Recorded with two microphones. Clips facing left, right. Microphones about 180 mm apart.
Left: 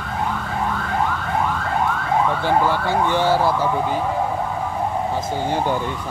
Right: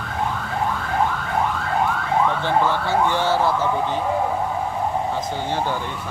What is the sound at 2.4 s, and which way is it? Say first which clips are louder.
Speech: left 1 dB; 10° left (ahead or behind).